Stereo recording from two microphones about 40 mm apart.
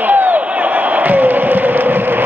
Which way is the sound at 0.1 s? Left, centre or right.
Right.